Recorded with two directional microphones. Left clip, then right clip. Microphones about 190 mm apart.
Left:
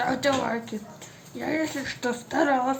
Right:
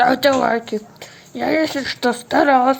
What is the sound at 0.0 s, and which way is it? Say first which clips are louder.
Speech: right 10 dB; 40° right (ahead or behind).